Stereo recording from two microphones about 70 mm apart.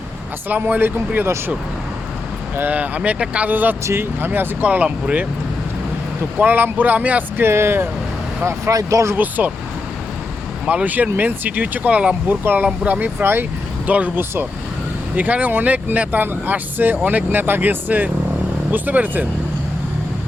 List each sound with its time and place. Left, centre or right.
0.4 s speech: right
2.6 s speech: right
6.4 s speech: right
7.4 s speech: right
8.7 s speech: right
9.1 s speech: right
10.7 s speech: right